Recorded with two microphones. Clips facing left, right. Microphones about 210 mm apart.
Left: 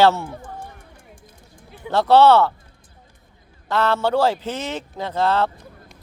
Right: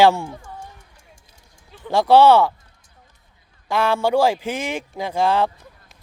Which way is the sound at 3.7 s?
10° right (ahead or behind).